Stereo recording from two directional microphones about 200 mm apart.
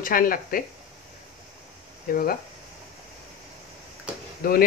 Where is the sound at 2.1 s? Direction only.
45° left (ahead or behind).